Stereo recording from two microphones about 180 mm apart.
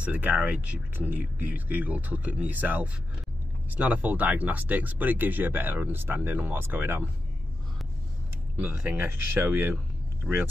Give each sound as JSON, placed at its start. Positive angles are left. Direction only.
{"t": 0.0, "sound": "speech", "side_deg": -10}
{"t": 8.5, "sound": "speech", "side_deg": -10}